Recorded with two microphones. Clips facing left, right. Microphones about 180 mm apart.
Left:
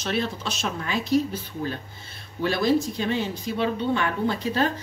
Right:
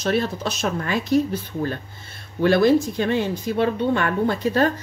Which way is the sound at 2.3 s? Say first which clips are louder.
Right 6 dB; 55° right (ahead or behind).